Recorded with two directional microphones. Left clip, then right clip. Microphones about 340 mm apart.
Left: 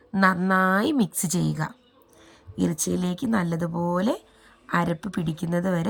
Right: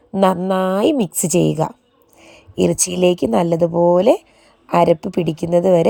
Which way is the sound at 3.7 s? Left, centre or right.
Centre.